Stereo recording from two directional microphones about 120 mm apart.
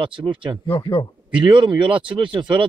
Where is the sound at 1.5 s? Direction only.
40° right (ahead or behind).